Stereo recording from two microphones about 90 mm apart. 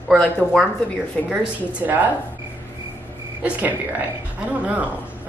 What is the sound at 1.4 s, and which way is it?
Speech, 15° right (ahead or behind).